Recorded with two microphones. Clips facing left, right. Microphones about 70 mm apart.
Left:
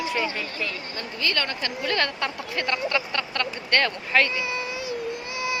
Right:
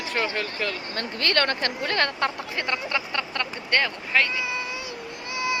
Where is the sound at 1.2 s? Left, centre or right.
Right.